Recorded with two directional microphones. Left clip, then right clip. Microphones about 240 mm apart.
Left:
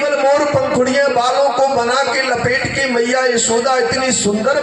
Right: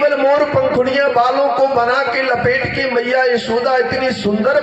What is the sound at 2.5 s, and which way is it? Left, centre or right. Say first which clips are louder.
A man's voice: even; right.